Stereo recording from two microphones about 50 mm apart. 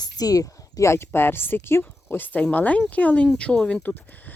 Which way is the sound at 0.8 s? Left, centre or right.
Left.